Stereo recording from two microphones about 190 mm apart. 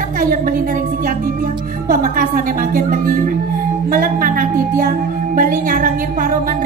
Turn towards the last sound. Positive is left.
turn(degrees=-45)  # may be behind; listen again after turning